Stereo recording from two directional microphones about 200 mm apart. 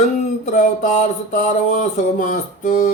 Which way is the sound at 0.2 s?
40° left (ahead or behind).